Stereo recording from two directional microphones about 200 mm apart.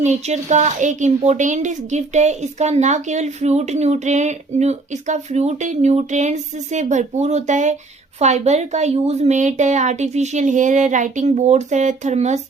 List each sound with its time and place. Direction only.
0.0 s speech: 35° right (ahead or behind)